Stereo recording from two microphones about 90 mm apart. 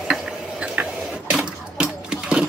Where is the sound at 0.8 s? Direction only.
20° right (ahead or behind).